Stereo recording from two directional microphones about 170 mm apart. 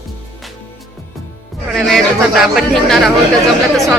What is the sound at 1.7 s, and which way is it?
Speech, centre (ahead or behind).